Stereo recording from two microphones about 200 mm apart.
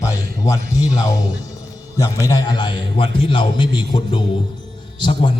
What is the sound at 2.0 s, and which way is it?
A man's voice, 20° left (ahead or behind).